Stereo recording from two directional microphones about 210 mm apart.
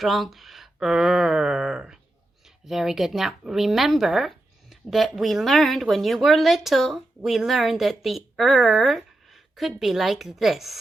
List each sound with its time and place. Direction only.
0.0 s speech: centre (ahead or behind)